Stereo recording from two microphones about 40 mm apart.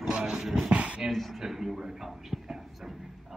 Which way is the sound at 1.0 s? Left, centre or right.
Centre.